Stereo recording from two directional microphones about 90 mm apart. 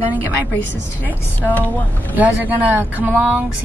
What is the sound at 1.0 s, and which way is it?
Speech, 20° left (ahead or behind).